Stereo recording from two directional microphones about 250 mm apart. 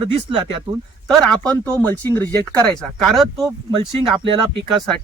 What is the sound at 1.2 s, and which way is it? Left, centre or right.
Speech, centre.